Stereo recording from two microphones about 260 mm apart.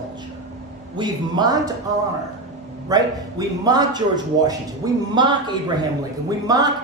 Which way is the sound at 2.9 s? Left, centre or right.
Centre.